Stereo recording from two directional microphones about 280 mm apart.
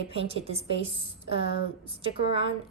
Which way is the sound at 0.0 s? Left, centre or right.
Right.